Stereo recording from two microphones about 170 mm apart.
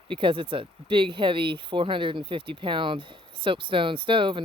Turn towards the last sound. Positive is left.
turn(degrees=-30)  # may be behind; listen again after turning